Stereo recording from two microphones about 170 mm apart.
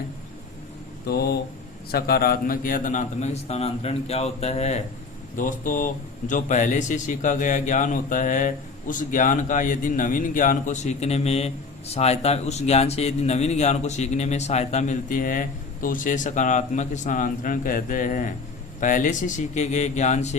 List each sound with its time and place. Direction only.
1.0 s a man's voice: 70° left (ahead or behind); by 4.8 s 40° left (ahead or behind)
5.4 s speech: 50° left (ahead or behind)